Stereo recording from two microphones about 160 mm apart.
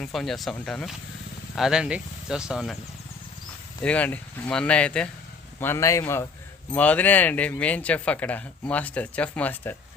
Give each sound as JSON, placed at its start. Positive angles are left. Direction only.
{"t": 0.0, "sound": "speech", "side_deg": 0}
{"t": 3.8, "sound": "speech", "side_deg": 10}